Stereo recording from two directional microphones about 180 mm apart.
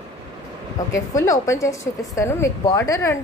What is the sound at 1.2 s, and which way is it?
A woman's voice, 15° left (ahead or behind).